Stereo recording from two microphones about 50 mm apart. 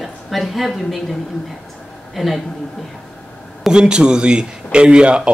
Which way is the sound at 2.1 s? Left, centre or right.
Centre.